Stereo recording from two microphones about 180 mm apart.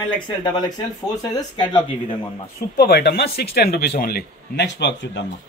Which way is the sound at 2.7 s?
60° left (ahead or behind).